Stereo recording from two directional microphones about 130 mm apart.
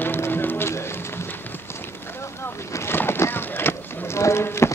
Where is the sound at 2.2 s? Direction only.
20° left (ahead or behind).